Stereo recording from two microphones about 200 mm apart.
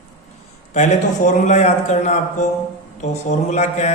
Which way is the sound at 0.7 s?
35° left (ahead or behind).